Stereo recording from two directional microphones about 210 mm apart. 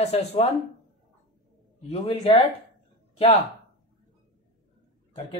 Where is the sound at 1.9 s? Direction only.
30° left (ahead or behind).